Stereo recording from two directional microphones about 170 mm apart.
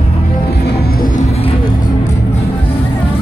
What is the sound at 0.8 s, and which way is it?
Music, 60° left (ahead or behind).